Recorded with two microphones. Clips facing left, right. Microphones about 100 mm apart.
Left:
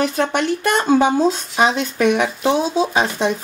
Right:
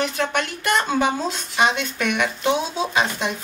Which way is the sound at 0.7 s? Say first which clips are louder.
Left 6 dB; 35° left (ahead or behind).